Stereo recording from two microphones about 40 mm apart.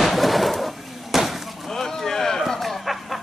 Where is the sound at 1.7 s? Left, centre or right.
Centre.